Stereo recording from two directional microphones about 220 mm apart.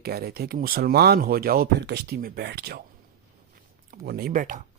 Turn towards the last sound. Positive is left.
turn(degrees=-35)  # may be behind; listen again after turning